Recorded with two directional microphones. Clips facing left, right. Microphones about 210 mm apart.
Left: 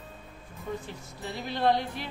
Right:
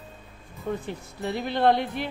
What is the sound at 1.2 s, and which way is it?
Speech, 60° right (ahead or behind).